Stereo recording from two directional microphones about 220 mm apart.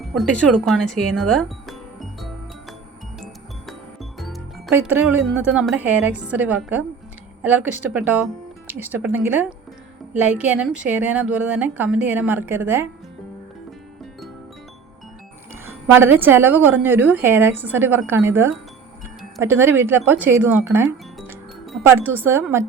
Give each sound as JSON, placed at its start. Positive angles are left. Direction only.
{"t": 0.0, "sound": "music", "side_deg": 0}
{"t": 4.2, "sound": "music", "side_deg": 0}
{"t": 4.7, "sound": "a woman's voice", "side_deg": -5}
{"t": 15.6, "sound": "a woman's voice", "side_deg": -10}